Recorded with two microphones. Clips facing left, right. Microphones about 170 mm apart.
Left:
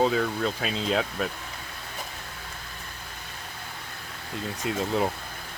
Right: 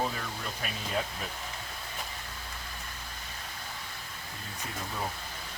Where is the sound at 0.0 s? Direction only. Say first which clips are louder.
Left 10 dB; 90° left.